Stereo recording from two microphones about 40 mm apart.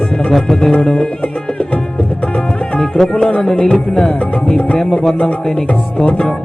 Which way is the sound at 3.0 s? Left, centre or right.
Centre.